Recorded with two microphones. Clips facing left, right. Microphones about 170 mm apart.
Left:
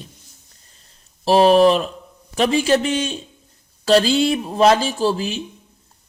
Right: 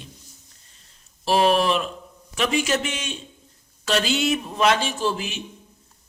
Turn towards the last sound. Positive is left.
turn(degrees=35)  # may be behind; listen again after turning